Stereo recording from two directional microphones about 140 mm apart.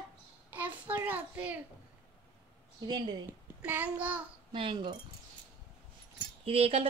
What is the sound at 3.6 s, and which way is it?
Speech, 10° right (ahead or behind).